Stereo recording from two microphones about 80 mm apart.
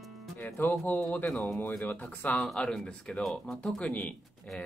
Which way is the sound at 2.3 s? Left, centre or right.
Centre.